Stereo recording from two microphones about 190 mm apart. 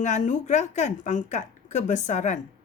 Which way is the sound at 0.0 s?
40° left (ahead or behind).